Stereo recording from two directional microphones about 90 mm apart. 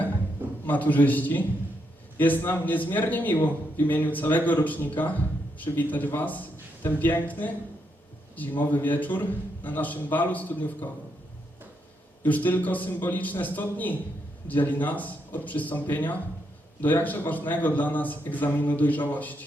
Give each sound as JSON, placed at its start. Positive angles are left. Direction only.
{"t": 0.7, "sound": "a man's voice", "side_deg": 20}
{"t": 12.2, "sound": "a man's voice", "side_deg": 20}